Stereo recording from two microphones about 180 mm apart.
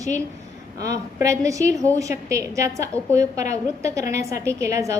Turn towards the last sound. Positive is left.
turn(degrees=-15)  # may be behind; listen again after turning